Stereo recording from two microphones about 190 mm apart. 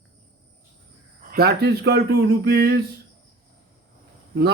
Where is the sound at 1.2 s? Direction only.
50° right (ahead or behind).